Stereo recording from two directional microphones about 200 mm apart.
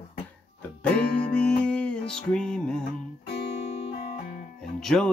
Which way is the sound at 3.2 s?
35° left (ahead or behind).